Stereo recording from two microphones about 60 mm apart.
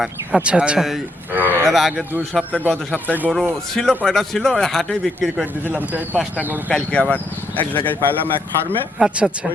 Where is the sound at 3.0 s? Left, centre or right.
Right.